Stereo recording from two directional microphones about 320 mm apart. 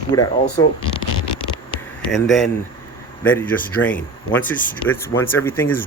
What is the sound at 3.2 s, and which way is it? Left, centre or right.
Speech, centre.